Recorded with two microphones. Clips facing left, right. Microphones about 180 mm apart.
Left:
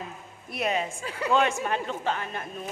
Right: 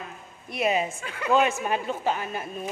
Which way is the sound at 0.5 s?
5° right (ahead or behind).